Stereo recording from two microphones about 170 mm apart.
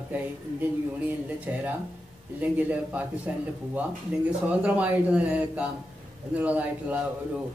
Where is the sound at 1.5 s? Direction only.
10° right (ahead or behind).